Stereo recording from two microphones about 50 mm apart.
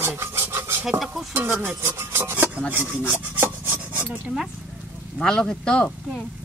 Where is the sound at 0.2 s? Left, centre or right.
Right.